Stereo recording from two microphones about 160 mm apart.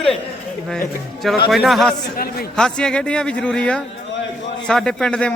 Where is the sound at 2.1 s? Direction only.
70° left (ahead or behind).